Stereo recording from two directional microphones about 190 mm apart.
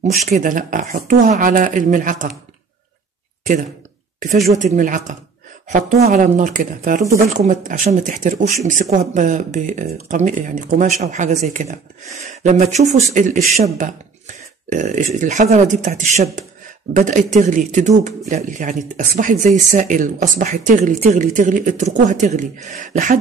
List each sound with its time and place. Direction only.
0.0 s speech: 40° right (ahead or behind)
4.5 s speech: 40° right (ahead or behind)